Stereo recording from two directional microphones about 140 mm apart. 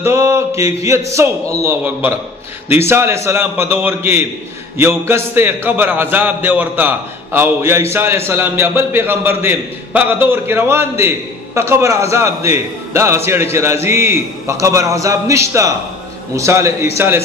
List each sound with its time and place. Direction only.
0.0 s mantra: 20° right (ahead or behind)
0.6 s a man's voice: 20° right (ahead or behind)